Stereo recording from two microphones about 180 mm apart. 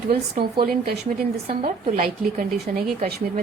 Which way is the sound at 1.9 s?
45° right (ahead or behind).